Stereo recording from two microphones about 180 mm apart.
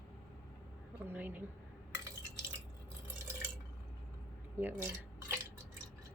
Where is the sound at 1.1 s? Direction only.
10° right (ahead or behind).